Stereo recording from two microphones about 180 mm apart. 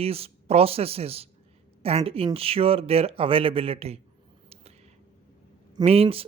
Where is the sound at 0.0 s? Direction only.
35° right (ahead or behind).